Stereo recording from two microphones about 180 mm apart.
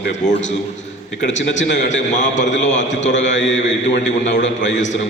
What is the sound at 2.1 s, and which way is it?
Speech, 40° left (ahead or behind).